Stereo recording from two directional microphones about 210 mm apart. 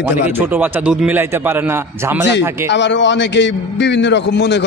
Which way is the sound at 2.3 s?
60° left (ahead or behind).